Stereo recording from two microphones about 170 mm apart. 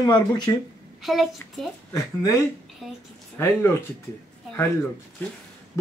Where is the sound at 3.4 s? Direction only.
15° left (ahead or behind).